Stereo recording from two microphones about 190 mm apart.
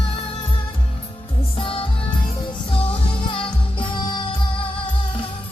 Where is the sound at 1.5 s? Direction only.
30° left (ahead or behind).